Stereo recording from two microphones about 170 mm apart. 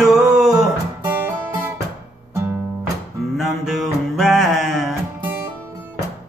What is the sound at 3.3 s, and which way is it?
Music, centre (ahead or behind).